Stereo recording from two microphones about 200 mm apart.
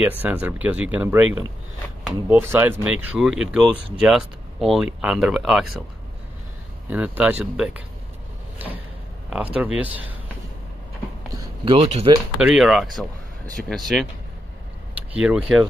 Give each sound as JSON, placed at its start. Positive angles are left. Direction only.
{"t": 0.2, "sound": "speech", "side_deg": -10}
{"t": 6.9, "sound": "speech", "side_deg": -10}
{"t": 11.2, "sound": "a sound", "side_deg": -25}
{"t": 12.4, "sound": "speech", "side_deg": -5}